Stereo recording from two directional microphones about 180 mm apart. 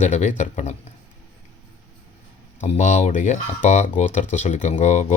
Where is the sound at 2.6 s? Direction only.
40° left (ahead or behind).